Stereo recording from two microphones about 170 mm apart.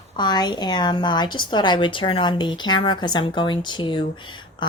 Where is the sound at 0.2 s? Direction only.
25° left (ahead or behind).